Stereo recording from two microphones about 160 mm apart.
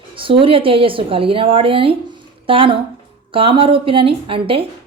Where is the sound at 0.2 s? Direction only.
35° right (ahead or behind).